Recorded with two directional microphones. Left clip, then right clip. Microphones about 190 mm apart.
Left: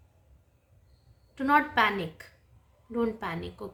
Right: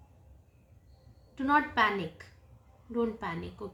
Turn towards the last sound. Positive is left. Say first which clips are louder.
# left 2 dB
turn(degrees=20)  # may be behind; listen again after turning